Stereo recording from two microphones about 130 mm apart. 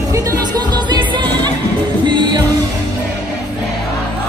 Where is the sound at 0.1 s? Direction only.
35° right (ahead or behind).